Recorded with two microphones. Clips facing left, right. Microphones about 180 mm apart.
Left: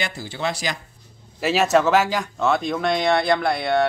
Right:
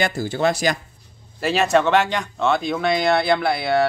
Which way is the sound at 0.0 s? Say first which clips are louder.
Right 7 dB; 45° right (ahead or behind).